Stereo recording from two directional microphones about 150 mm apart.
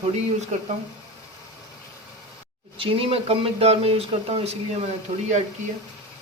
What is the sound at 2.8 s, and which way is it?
Speech, 40° right (ahead or behind).